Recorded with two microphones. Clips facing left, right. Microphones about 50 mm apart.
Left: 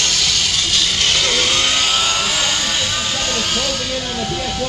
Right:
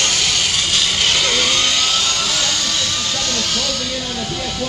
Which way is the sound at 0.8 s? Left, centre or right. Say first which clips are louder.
Even; centre.